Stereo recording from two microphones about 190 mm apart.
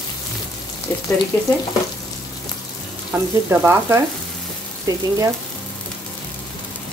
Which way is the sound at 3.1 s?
10° right (ahead or behind).